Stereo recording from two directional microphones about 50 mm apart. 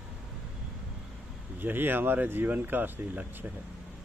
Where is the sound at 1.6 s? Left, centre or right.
Right.